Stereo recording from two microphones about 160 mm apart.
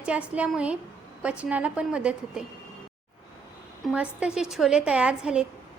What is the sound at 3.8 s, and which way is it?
A woman's voice, 5° right (ahead or behind).